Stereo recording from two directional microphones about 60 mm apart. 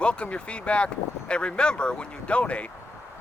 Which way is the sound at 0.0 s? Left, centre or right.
Centre.